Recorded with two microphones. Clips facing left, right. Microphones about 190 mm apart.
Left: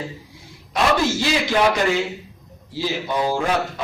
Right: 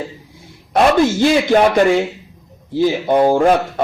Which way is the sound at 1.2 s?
50° right (ahead or behind).